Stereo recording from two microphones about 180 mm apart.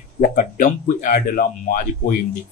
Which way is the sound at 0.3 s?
50° left (ahead or behind).